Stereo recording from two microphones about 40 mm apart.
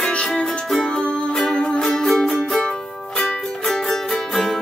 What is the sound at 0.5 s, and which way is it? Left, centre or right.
Music, centre.